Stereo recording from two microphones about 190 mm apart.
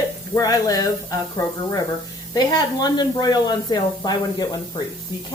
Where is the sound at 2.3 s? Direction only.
20° left (ahead or behind).